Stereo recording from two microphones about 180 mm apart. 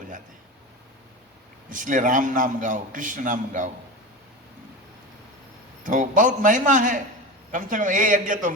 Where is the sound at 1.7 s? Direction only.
45° right (ahead or behind).